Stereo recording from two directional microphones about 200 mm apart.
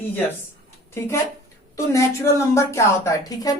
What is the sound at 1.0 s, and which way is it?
Speech, 15° left (ahead or behind).